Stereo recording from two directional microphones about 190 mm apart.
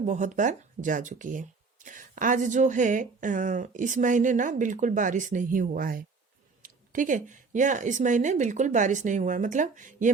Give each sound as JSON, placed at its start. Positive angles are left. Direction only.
{"t": 0.0, "sound": "a woman's voice", "side_deg": -40}